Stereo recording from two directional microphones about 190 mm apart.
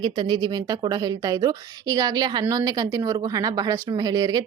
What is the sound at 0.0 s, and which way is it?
Speech, 25° right (ahead or behind).